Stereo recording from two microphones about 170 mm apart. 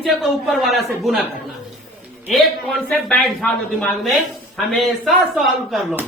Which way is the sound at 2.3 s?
Centre (ahead or behind).